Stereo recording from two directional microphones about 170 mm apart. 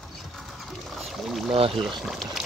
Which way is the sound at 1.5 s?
35° right (ahead or behind).